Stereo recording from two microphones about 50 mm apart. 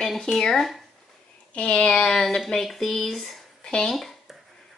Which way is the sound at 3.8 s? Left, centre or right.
Centre.